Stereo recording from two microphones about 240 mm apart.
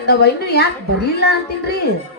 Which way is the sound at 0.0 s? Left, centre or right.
Left.